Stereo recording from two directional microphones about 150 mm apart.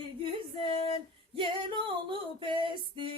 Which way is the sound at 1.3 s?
35° right (ahead or behind).